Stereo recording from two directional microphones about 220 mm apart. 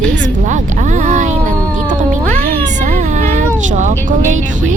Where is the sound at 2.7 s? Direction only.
35° right (ahead or behind).